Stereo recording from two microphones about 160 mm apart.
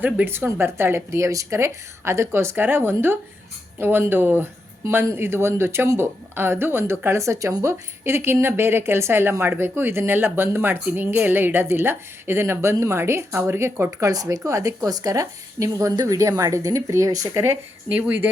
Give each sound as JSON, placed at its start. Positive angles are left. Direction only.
{"t": 0.0, "sound": "a woman's voice", "side_deg": -10}